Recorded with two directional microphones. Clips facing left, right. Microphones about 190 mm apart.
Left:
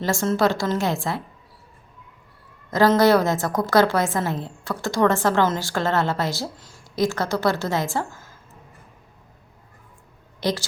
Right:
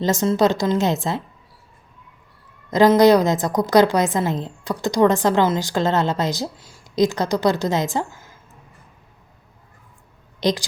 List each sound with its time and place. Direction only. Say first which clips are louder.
0.0 s a woman's voice: right 3 dB; 20° right (ahead or behind)
2.6 s a woman's voice: right 4 dB; 15° right (ahead or behind)
10.4 s a woman's voice: right 4 dB; 15° right (ahead or behind)